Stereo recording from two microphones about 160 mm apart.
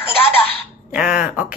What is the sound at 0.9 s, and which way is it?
Speech, 5° right (ahead or behind).